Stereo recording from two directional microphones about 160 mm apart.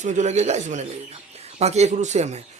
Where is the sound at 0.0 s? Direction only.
50° right (ahead or behind).